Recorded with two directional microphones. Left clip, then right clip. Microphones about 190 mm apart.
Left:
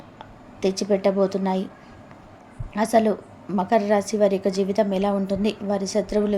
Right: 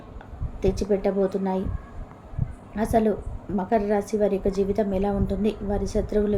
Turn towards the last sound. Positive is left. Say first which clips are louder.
# left 2 dB
turn(degrees=15)  # may be behind; listen again after turning